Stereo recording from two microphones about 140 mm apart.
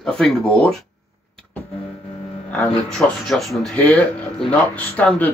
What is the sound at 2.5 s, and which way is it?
Speech, 5° left (ahead or behind).